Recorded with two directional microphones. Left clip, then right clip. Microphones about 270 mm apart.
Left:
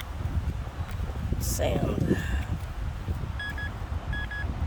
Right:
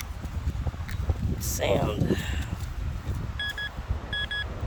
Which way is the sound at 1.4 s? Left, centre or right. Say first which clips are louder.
Right 3 dB; centre.